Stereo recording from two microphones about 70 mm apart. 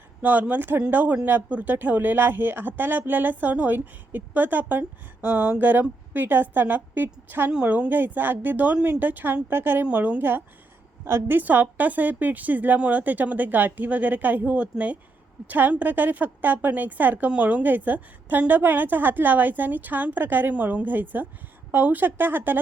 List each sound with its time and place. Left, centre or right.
0.2 s a woman's voice: right